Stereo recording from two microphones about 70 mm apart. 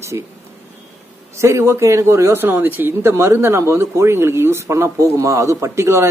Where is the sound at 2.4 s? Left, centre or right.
Right.